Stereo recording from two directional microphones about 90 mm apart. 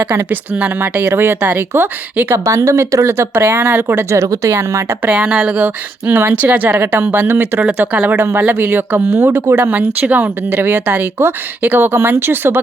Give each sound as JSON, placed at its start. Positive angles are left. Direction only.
{"t": 0.3, "sound": "speech", "side_deg": -20}
{"t": 5.0, "sound": "speech", "side_deg": -15}